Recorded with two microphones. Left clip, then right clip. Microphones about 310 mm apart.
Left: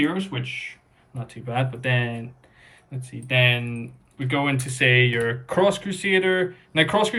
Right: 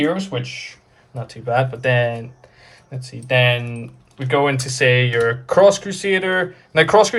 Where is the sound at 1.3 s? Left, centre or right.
Centre.